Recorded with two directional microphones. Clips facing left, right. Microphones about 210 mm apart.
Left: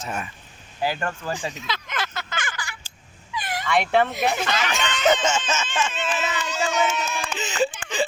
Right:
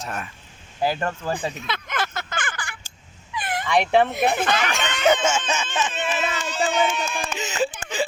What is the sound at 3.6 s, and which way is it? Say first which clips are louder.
Speech: right 2 dB; 15° right (ahead or behind).